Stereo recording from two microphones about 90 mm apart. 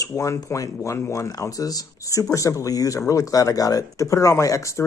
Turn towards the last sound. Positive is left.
turn(degrees=35)  # may be behind; listen again after turning